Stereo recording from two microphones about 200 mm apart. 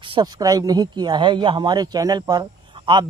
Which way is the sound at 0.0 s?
25° right (ahead or behind).